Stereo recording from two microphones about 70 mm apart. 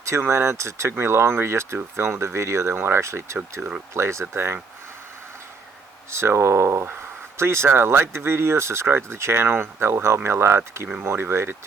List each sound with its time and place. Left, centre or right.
0.0 s speech: right
3.6 s speech: centre
3.9 s speech: right
6.1 s speech: right